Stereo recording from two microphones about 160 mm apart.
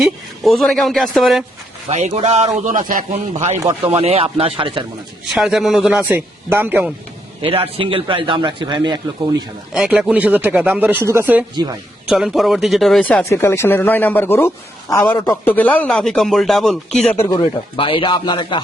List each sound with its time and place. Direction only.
0.0 s a man's voice: centre (ahead or behind)
1.9 s a man's voice: 40° right (ahead or behind)
2.6 s a man's voice: 60° right (ahead or behind); by 4.8 s 35° right (ahead or behind)
5.3 s a man's voice: centre (ahead or behind)
6.0 s speech: 15° right (ahead or behind)
7.4 s a man's voice: 35° right (ahead or behind)
9.7 s a man's voice: 5° right (ahead or behind)
13.2 s a man's voice: 15° left (ahead or behind)
17.2 s speech: 20° left (ahead or behind)
17.7 s a man's voice: 35° left (ahead or behind)